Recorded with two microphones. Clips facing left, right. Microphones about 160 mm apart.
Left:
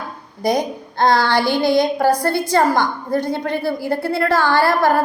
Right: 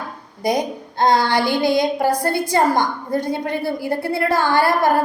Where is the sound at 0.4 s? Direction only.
20° right (ahead or behind).